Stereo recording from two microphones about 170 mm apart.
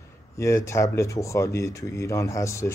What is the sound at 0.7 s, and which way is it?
Speech, 20° left (ahead or behind).